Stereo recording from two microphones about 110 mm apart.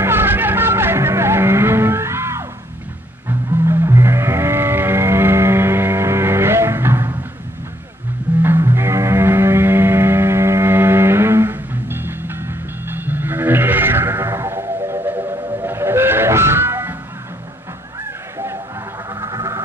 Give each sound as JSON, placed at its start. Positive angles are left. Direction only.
{"t": 0.0, "sound": "music", "side_deg": -20}
{"t": 8.4, "sound": "music", "side_deg": -20}
{"t": 19.1, "sound": "music", "side_deg": -35}